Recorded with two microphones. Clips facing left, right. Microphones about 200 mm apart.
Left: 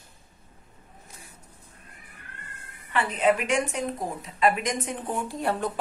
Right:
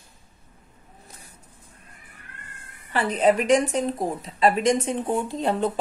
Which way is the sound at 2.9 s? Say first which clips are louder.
Right 3 dB; 35° right (ahead or behind).